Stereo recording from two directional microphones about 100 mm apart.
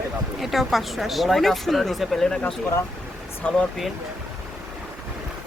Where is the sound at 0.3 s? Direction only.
Centre (ahead or behind).